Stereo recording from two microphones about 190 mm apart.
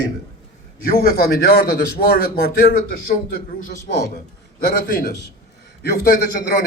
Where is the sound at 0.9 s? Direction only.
50° left (ahead or behind).